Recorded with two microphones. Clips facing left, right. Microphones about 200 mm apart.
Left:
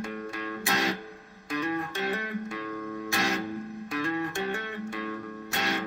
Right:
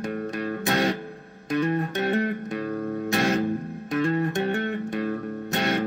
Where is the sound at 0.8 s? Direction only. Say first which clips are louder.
Right 5 dB; 40° right (ahead or behind).